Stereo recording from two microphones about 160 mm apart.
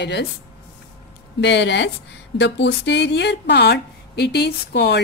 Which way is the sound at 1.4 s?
90° left.